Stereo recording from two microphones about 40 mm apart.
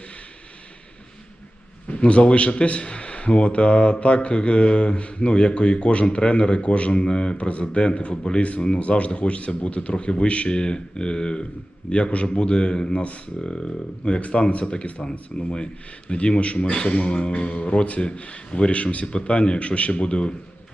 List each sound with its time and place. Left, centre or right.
1.9 s speech: left